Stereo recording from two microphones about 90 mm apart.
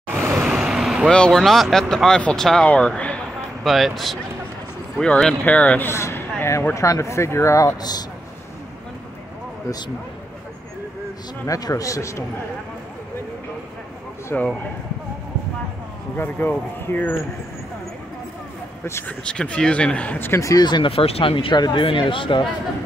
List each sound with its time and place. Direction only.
0.1 s vehicle: 20° right (ahead or behind)
0.4 s vehicle: 10° right (ahead or behind)
1.1 s speech: 5° left (ahead or behind)
3.6 s speech: centre (ahead or behind)
5.9 s speech: 30° left (ahead or behind)
11.4 s speech: 40° left (ahead or behind)
14.3 s speech: 20° left (ahead or behind)
16.2 s speech: 20° left (ahead or behind)
19.0 s speech: 10° left (ahead or behind)
20.3 s speech: 35° left (ahead or behind)
20.6 s speech: 55° left (ahead or behind)
20.9 s speech: 90° left
21.5 s speech: 50° left (ahead or behind)
21.8 s speech: 75° left (ahead or behind)